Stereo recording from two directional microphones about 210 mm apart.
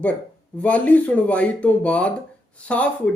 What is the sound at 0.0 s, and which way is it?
A man's voice, 5° left (ahead or behind).